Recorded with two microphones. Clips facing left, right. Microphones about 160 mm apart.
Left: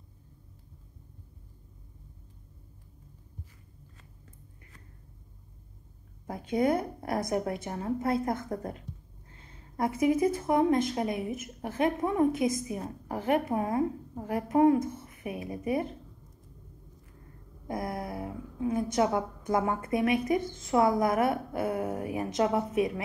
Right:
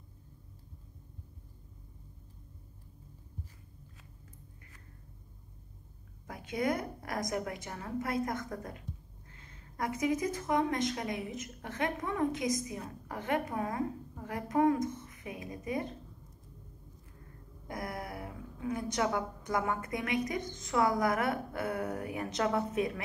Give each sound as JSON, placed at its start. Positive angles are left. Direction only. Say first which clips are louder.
{"t": 6.2, "sound": "a woman's voice", "louder": "left 6 dB", "side_deg": 25}
{"t": 17.6, "sound": "a woman's voice", "louder": "left 5 dB", "side_deg": 25}